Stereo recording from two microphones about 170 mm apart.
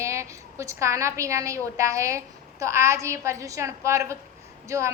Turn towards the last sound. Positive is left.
turn(degrees=-15)  # may be behind; listen again after turning